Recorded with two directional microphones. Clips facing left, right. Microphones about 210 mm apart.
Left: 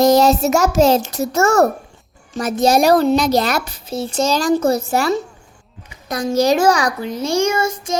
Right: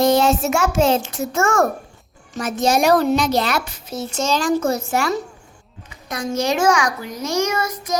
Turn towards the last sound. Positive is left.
turn(degrees=30)  # may be behind; listen again after turning